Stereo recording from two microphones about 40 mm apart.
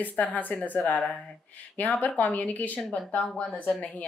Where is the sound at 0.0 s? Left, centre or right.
Left.